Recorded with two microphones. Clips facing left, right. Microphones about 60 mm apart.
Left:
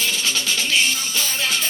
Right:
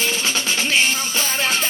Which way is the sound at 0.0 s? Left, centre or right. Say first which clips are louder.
Right 2 dB; right.